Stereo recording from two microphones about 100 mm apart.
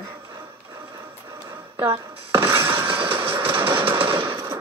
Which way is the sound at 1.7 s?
30° right (ahead or behind).